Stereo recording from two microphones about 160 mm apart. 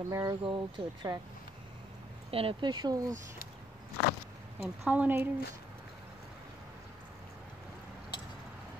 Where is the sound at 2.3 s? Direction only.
30° right (ahead or behind).